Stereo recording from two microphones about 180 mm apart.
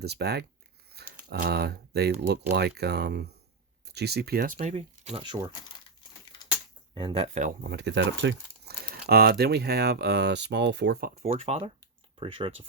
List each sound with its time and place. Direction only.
0.0 s speech: 65° right (ahead or behind)
0.9 s a sound: 60° right (ahead or behind)
2.5 s speech: 65° right (ahead or behind)
4.6 s speech: 35° right (ahead or behind)
6.9 s speech: 25° right (ahead or behind)
7.7 s speech: 75° right (ahead or behind)
11.2 s speech: 35° right (ahead or behind)